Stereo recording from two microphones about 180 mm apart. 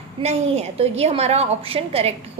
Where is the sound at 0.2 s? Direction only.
35° right (ahead or behind).